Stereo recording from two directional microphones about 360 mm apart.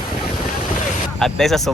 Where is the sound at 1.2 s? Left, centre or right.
Centre.